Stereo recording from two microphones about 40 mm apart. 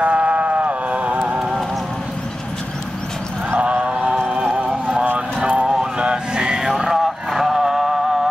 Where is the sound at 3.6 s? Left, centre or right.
Right.